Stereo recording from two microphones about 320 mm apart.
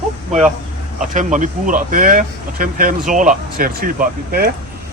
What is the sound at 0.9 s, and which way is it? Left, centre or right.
Speech, right.